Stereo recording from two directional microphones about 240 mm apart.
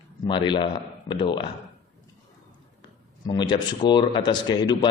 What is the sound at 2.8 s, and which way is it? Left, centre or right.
Speech, centre.